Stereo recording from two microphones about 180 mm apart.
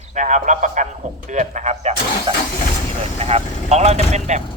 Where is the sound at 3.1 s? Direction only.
35° right (ahead or behind).